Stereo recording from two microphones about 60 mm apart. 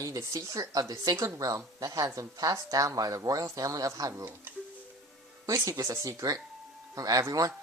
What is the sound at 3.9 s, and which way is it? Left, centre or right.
Speech, right.